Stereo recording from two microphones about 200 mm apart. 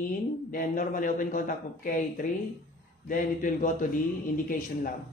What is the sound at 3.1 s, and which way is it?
Speech, 40° left (ahead or behind).